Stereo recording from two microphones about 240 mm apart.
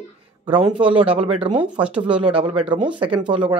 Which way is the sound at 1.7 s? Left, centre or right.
Centre.